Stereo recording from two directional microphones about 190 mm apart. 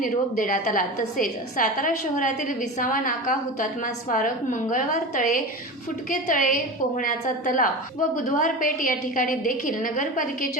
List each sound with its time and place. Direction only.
0.0 s a woman's voice: 45° left (ahead or behind)
6.1 s a woman's voice: 45° left (ahead or behind)